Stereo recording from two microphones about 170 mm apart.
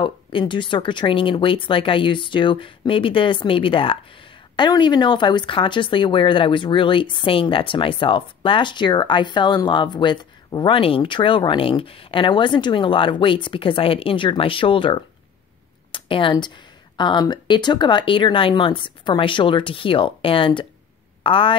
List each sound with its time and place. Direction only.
0.0 s speech: 30° left (ahead or behind)